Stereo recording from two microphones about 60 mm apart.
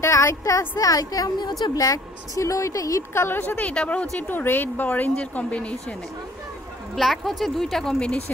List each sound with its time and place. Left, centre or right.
0.0 s a woman's voice: left
0.4 s a woman's voice: left
1.6 s a woman's voice: left
3.2 s speech: left
4.3 s speech: left
7.0 s a woman's voice: centre